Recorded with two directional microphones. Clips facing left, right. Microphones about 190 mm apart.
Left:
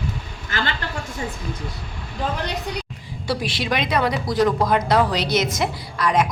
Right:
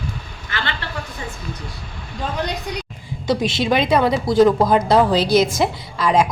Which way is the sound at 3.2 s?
20° right (ahead or behind).